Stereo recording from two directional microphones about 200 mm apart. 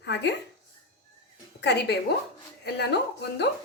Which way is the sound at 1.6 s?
60° left (ahead or behind).